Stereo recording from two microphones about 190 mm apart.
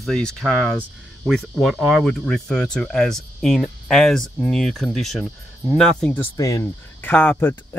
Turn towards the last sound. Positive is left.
turn(degrees=10)  # may be behind; listen again after turning